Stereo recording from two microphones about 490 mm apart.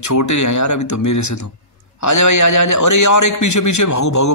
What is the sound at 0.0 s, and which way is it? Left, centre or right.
A man's voice, left.